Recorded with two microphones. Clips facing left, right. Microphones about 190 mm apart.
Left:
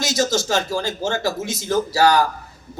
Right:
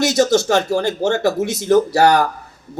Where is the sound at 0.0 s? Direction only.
60° right (ahead or behind).